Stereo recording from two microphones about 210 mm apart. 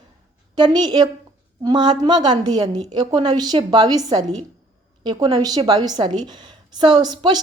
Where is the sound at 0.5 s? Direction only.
20° right (ahead or behind).